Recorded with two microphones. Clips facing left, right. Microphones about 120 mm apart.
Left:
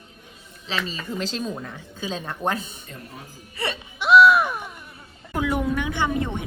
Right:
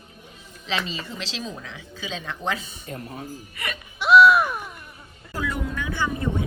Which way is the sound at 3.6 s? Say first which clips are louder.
Left 5 dB; 30° left (ahead or behind).